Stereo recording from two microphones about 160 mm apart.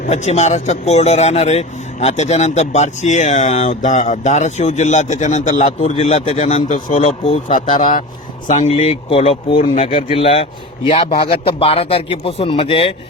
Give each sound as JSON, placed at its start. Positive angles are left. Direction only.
{"t": 0.1, "sound": "speech", "side_deg": 45}
{"t": 7.8, "sound": "a man's voice", "side_deg": 55}